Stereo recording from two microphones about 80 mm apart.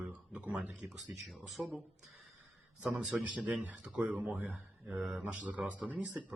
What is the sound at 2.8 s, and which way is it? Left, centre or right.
Speech, centre.